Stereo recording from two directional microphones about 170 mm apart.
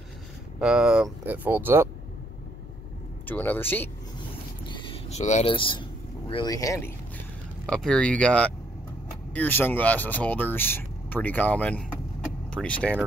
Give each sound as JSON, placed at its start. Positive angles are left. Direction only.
{"t": 0.6, "sound": "speech", "side_deg": -5}
{"t": 3.3, "sound": "speech", "side_deg": 10}
{"t": 4.6, "sound": "a sound", "side_deg": 30}
{"t": 5.5, "sound": "vehicle", "side_deg": 30}
{"t": 6.5, "sound": "speech", "side_deg": 20}
{"t": 7.6, "sound": "speech", "side_deg": 5}